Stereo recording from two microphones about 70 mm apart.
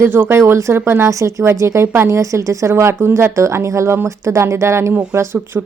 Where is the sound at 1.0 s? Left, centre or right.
Right.